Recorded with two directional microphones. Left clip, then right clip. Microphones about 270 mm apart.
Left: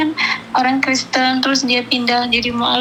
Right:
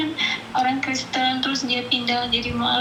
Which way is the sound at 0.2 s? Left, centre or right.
Left.